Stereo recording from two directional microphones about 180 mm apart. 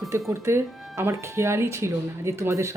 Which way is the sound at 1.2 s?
15° right (ahead or behind).